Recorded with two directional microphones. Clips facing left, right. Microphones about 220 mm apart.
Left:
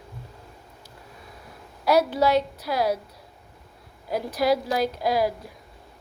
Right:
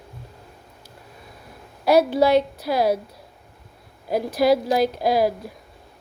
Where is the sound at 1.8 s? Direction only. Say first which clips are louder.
Right 4 dB; 30° right (ahead or behind).